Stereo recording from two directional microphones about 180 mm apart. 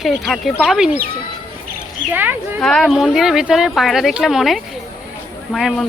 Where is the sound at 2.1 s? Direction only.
10° right (ahead or behind).